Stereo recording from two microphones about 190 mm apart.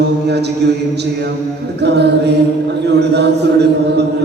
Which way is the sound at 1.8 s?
60° right (ahead or behind).